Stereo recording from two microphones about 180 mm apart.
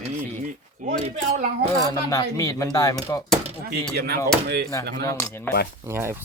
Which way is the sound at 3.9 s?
65° right (ahead or behind).